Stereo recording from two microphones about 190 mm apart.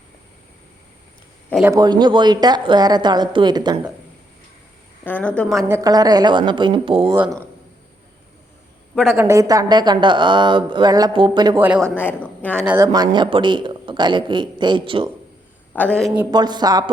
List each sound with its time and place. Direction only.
1.6 s speech: 20° right (ahead or behind)
5.0 s a woman's voice: 5° left (ahead or behind)
5.6 s speech: 15° right (ahead or behind)
9.1 s speech: 15° right (ahead or behind)
11.6 s a woman's voice: 10° right (ahead or behind)
11.9 s a woman's voice: 10° left (ahead or behind)
12.6 s speech: 15° right (ahead or behind)
15.7 s a woman's voice: 10° left (ahead or behind)
16.3 s speech: 20° right (ahead or behind)